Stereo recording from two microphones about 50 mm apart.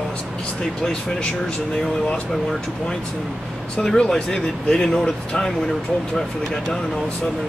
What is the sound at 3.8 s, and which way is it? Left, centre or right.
Speech, centre.